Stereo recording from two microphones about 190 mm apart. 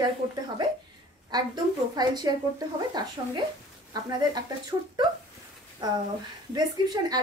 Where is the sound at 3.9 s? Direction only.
20° right (ahead or behind).